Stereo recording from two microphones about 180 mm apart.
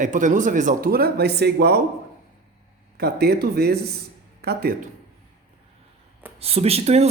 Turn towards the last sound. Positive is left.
turn(degrees=-35)  # may be behind; listen again after turning